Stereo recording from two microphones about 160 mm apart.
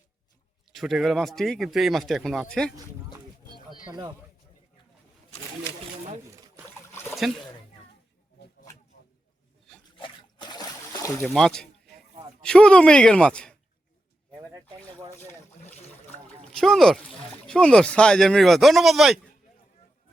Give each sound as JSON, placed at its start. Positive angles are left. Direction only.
{"t": 0.7, "sound": "speech", "side_deg": 0}
{"t": 7.2, "sound": "speech", "side_deg": 0}
{"t": 10.0, "sound": "trickle", "side_deg": 30}
{"t": 11.2, "sound": "speech", "side_deg": 5}
{"t": 15.6, "sound": "a sound", "side_deg": 40}
{"t": 16.5, "sound": "speech", "side_deg": 5}